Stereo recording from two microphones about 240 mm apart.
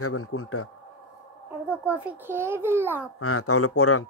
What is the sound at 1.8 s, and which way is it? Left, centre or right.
A child's voice, centre.